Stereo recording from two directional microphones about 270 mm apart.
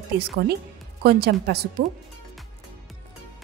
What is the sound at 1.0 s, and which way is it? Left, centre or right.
Speech, right.